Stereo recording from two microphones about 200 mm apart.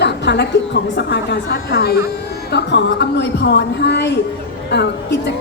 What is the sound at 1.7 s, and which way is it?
A woman's voice, 50° left (ahead or behind).